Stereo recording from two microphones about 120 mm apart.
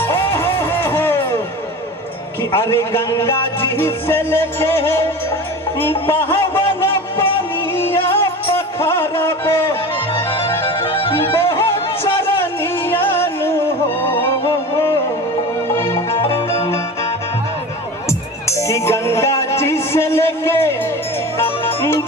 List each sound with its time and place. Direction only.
0.0 s music: 20° left (ahead or behind)
2.5 s music: 20° left (ahead or behind)
11.3 s music: 20° left (ahead or behind)
16.1 s music: 50° left (ahead or behind)
18.5 s music: 25° left (ahead or behind)